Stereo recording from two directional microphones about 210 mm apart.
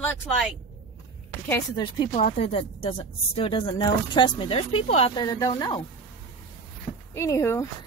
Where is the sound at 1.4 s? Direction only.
20° left (ahead or behind).